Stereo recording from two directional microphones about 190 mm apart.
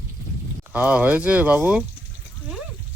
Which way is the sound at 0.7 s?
10° right (ahead or behind).